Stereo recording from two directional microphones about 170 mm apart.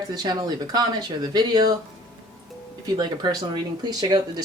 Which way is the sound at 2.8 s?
25° right (ahead or behind).